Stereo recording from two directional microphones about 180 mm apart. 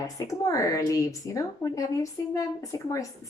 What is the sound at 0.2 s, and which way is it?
A woman's voice, 15° left (ahead or behind).